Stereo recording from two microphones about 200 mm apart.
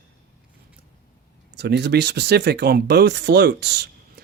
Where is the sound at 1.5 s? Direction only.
55° right (ahead or behind).